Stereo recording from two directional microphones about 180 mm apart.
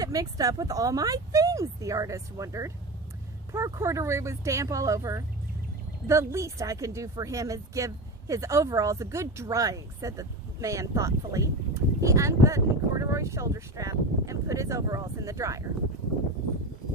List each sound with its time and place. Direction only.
0.0 s speech: 20° right (ahead or behind)